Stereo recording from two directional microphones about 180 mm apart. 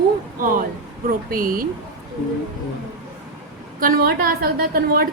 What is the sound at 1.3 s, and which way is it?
Speech, 50° right (ahead or behind).